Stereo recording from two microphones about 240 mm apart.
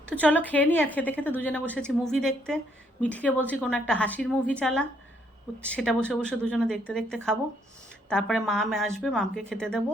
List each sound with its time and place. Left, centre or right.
0.0 s a woman's voice: centre